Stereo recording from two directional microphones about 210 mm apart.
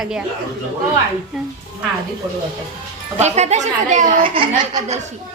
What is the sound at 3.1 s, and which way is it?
Speech, 30° right (ahead or behind).